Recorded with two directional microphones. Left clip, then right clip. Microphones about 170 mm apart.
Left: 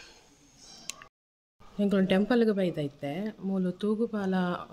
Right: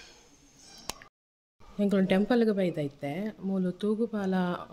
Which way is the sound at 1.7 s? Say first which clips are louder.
Even; centre (ahead or behind).